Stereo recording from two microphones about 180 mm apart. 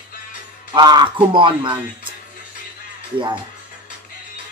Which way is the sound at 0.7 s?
25° right (ahead or behind).